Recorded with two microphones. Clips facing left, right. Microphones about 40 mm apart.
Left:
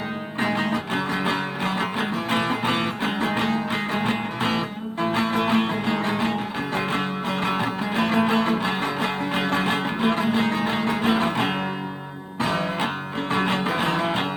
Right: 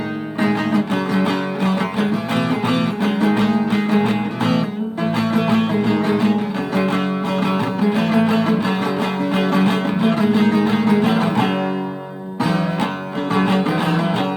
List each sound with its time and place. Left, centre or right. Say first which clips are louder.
0.3 s music: right 6 dB; left
12.4 s music: right 4 dB; left